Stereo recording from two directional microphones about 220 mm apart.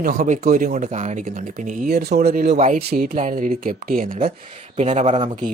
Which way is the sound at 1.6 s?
45° right (ahead or behind).